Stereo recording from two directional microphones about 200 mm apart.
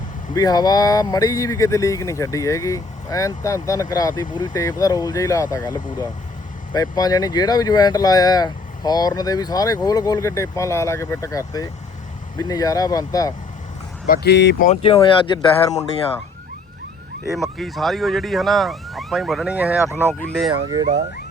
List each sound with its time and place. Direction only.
0.3 s speech: 20° left (ahead or behind)
14.1 s speech: 55° left (ahead or behind)
14.6 s speech: 30° left (ahead or behind)
17.6 s speech: centre (ahead or behind)
20.0 s speech: 10° left (ahead or behind)
20.5 s speech: 20° right (ahead or behind)